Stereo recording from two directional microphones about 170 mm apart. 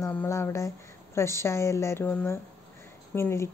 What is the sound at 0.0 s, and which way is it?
A woman's voice, 15° left (ahead or behind).